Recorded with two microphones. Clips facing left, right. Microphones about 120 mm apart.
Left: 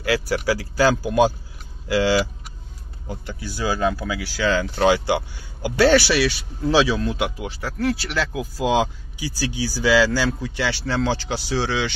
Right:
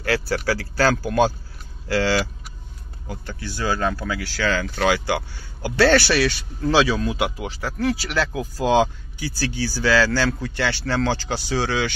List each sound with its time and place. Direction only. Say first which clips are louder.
0.3 s speech: left 1 dB; 10° left (ahead or behind)
4.5 s speech: left 3 dB; 25° left (ahead or behind); by 11.9 s centre (ahead or behind)